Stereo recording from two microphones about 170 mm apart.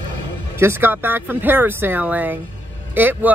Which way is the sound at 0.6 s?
15° right (ahead or behind).